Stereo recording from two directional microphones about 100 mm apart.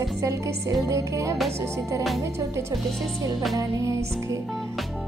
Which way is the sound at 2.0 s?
Centre (ahead or behind).